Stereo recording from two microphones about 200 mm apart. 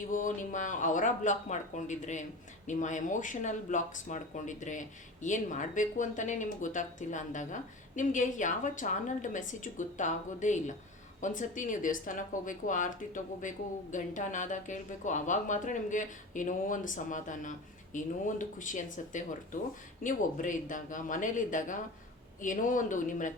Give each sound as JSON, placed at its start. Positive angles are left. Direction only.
{"t": 0.1, "sound": "speech", "side_deg": 40}